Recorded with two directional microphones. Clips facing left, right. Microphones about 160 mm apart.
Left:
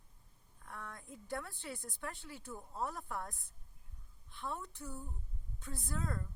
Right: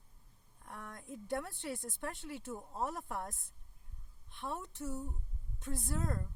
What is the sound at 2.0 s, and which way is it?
A woman's voice, 20° right (ahead or behind).